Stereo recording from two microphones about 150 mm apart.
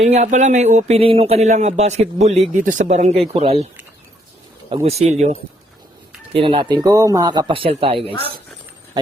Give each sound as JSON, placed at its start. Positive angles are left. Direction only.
{"t": 0.0, "sound": "speech", "side_deg": -50}
{"t": 4.7, "sound": "speech", "side_deg": -45}
{"t": 6.3, "sound": "speech", "side_deg": -35}